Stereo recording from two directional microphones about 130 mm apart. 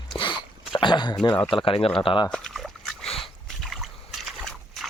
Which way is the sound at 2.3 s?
5° left (ahead or behind).